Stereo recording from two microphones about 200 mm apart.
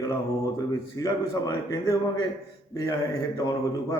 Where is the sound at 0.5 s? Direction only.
15° left (ahead or behind).